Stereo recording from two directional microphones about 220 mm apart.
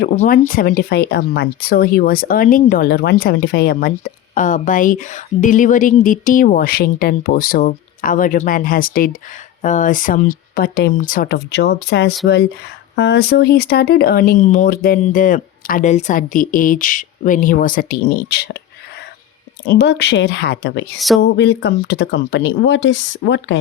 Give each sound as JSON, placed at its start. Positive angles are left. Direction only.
{"t": 0.0, "sound": "speech", "side_deg": 40}
{"t": 19.6, "sound": "speech", "side_deg": 45}